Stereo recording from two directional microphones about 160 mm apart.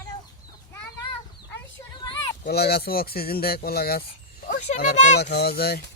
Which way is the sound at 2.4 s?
80° left.